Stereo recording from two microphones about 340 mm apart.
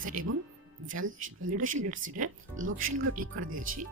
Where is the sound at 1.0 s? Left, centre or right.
Right.